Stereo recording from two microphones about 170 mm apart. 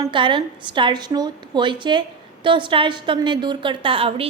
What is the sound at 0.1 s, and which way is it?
A woman's voice, 30° right (ahead or behind).